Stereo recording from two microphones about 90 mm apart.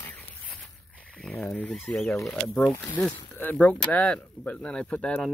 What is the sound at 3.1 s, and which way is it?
Speech, 20° left (ahead or behind).